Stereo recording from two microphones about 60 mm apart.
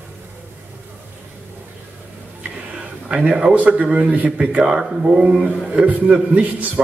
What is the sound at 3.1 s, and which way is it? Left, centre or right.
A man's voice, centre.